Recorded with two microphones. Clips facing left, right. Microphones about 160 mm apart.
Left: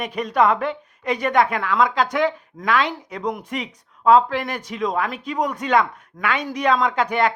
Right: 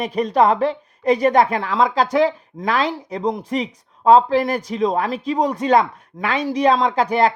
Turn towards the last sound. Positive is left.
turn(degrees=-35)  # may be behind; listen again after turning